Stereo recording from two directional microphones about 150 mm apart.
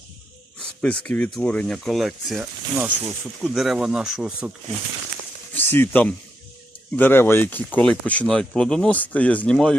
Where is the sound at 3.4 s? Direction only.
Centre (ahead or behind).